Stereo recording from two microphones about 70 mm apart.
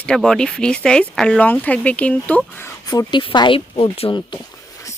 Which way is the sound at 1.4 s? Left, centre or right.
Left.